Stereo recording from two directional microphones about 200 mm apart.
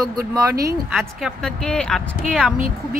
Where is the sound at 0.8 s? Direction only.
Centre (ahead or behind).